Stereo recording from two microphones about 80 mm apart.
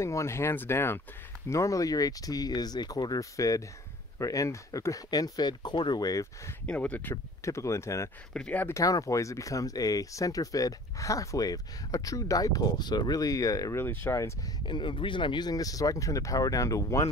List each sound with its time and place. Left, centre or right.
0.0 s speech: left
1.5 s speech: left
6.6 s speech: centre
7.4 s speech: left
8.3 s speech: centre
8.6 s speech: left
13.7 s speech: left
14.7 s speech: left